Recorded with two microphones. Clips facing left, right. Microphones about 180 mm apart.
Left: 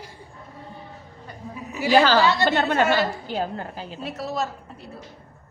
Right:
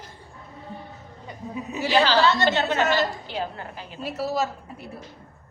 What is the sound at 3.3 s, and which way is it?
Speech, 40° left (ahead or behind).